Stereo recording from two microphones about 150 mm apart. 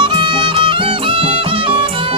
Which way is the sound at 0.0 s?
35° right (ahead or behind).